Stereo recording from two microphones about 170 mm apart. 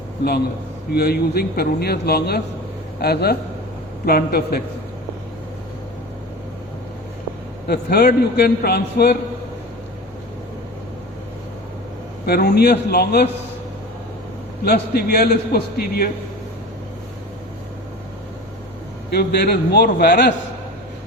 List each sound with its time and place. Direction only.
0.9 s a man's voice: 65° left (ahead or behind)
7.7 s a man's voice: 70° left (ahead or behind)
12.2 s a man's voice: 65° left (ahead or behind)
14.6 s a man's voice: 65° left (ahead or behind)
19.1 s a man's voice: 70° left (ahead or behind)